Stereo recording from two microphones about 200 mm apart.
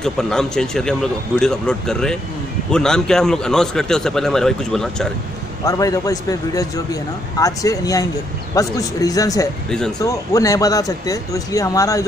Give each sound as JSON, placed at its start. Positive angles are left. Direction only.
{"t": 0.0, "sound": "a man's voice", "side_deg": 0}
{"t": 5.7, "sound": "speech", "side_deg": 15}
{"t": 9.7, "sound": "a man's voice", "side_deg": 5}
{"t": 9.9, "sound": "speech", "side_deg": 15}